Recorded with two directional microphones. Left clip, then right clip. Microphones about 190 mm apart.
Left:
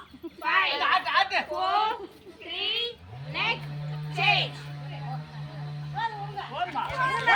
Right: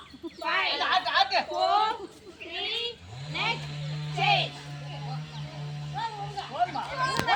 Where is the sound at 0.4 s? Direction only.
35° right (ahead or behind).